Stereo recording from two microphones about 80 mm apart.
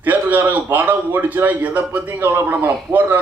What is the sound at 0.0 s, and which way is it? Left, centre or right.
A man's voice, right.